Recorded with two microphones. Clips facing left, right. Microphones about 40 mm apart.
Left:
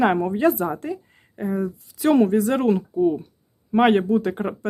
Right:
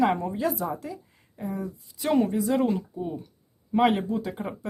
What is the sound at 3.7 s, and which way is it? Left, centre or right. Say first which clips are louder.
Speech: left 6 dB; left.